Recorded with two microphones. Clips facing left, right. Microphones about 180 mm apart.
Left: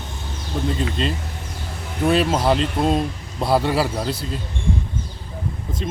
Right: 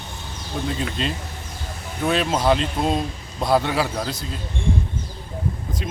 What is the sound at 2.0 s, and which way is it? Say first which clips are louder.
Speech: left 2 dB; 5° left (ahead or behind).